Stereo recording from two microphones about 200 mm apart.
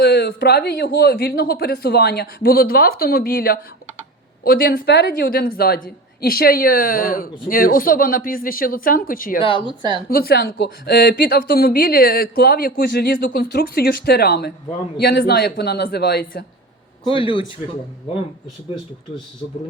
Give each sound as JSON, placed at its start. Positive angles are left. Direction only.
{"t": 0.0, "sound": "speech", "side_deg": 55}
{"t": 9.4, "sound": "speech", "side_deg": 25}
{"t": 10.1, "sound": "speech", "side_deg": 50}
{"t": 17.0, "sound": "speech", "side_deg": 25}